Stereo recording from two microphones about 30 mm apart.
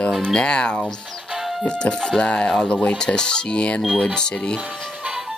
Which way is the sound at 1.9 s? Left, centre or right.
Left.